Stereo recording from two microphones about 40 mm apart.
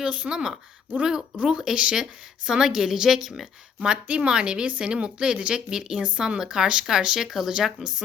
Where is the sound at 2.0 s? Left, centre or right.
Centre.